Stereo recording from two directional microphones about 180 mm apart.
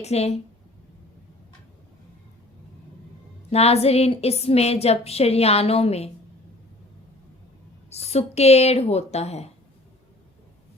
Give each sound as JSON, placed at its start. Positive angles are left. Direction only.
{"t": 0.0, "sound": "a woman's voice", "side_deg": 35}
{"t": 3.5, "sound": "a woman's voice", "side_deg": 35}
{"t": 7.9, "sound": "a woman's voice", "side_deg": 35}